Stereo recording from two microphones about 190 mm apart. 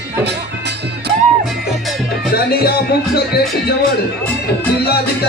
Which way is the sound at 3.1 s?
55° left (ahead or behind).